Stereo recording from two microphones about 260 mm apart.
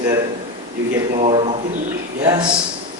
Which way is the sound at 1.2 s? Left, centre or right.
Right.